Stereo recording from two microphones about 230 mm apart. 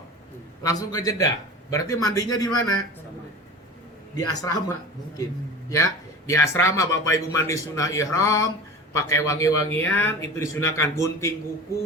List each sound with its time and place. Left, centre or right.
0.6 s speech: centre
4.3 s speech: centre